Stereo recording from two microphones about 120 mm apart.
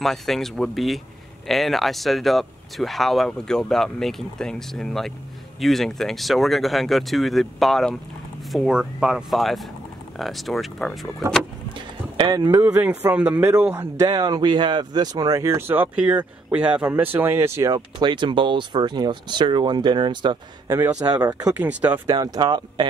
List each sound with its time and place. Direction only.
0.0 s speech: centre (ahead or behind)
12.4 s speech: 25° right (ahead or behind)
13.1 s speech: 10° right (ahead or behind)
13.7 s speech: 20° right (ahead or behind)
14.0 s speech: 35° right (ahead or behind)
17.7 s speech: 40° right (ahead or behind)
20.6 s speech: 20° right (ahead or behind)
21.0 s speech: 35° right (ahead or behind)
21.5 s speech: 15° right (ahead or behind)
22.0 s speech: 30° right (ahead or behind)